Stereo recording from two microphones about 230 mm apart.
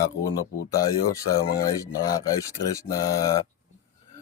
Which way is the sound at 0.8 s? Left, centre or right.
Centre.